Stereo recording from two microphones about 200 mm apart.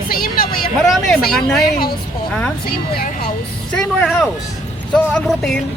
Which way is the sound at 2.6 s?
50° left (ahead or behind).